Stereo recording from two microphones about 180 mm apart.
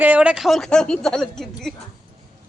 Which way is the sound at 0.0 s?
10° right (ahead or behind).